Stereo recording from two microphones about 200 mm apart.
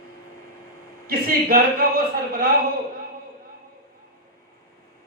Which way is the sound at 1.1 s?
50° right (ahead or behind).